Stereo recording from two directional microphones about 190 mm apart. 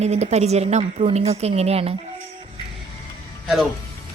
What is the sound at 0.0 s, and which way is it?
A woman's voice, 35° right (ahead or behind).